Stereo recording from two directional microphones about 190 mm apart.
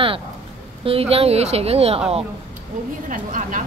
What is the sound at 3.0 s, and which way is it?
Speech, 45° right (ahead or behind).